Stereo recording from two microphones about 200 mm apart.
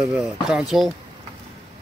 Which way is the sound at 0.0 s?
5° right (ahead or behind).